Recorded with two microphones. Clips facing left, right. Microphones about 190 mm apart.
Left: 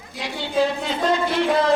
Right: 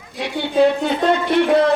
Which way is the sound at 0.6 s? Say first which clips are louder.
Right 6 dB; 60° right (ahead or behind).